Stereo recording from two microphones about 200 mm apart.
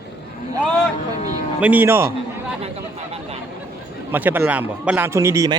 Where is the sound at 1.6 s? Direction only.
10° right (ahead or behind).